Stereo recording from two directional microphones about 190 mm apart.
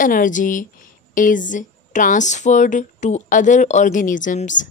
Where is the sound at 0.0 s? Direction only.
45° left (ahead or behind).